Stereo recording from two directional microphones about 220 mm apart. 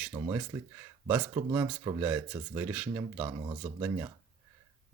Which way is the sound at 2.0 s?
10° right (ahead or behind).